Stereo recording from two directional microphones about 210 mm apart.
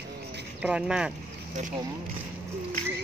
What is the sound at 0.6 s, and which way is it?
Speech, 5° right (ahead or behind).